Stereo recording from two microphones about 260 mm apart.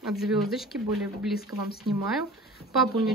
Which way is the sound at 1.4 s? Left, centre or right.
Left.